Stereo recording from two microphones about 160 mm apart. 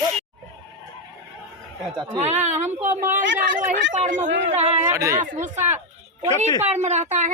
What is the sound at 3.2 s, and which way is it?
Speech, 55° right (ahead or behind).